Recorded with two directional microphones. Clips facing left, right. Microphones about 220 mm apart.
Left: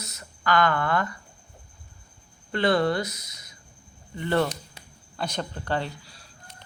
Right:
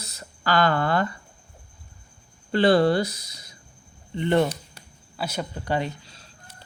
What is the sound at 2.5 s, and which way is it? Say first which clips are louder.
Speech: right 4 dB; 30° right (ahead or behind).